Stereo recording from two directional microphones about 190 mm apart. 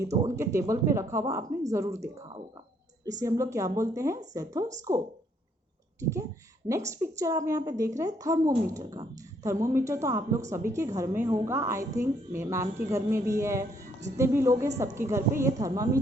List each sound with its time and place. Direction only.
0.0 s a woman's voice: 15° right (ahead or behind)
6.0 s a woman's voice: 15° right (ahead or behind)